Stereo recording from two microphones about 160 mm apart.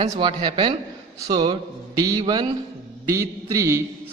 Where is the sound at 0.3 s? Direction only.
30° right (ahead or behind).